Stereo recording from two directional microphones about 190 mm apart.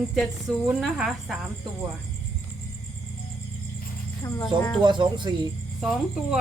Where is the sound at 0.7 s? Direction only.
5° right (ahead or behind).